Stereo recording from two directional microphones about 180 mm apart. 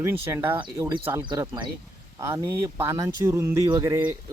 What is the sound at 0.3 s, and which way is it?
Speech, 15° right (ahead or behind).